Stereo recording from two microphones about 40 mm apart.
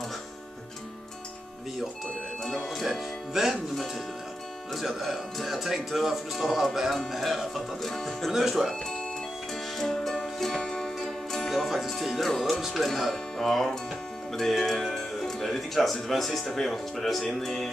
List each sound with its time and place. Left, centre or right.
2.4 s music: centre
4.7 s speech: centre
7.9 s speech: centre
8.3 s speech: centre
9.8 s music: centre
13.1 s speech: centre